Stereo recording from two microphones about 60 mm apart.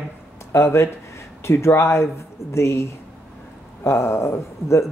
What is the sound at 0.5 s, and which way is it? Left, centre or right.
Speech, left.